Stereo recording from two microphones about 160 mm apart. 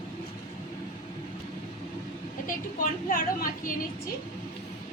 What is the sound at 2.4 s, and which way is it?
A woman's voice, 60° left (ahead or behind).